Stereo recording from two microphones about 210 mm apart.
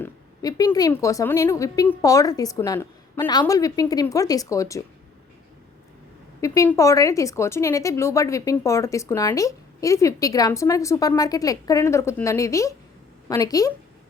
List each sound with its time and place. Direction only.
0.0 s a woman's voice: 15° left (ahead or behind)
6.4 s a woman's voice: 15° left (ahead or behind)